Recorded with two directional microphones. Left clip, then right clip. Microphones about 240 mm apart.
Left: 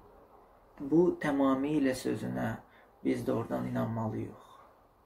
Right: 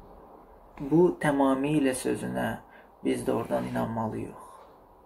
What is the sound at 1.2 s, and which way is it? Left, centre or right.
Speech, centre.